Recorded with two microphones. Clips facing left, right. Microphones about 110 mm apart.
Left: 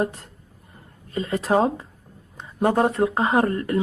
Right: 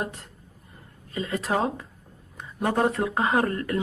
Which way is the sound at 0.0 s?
30° left (ahead or behind).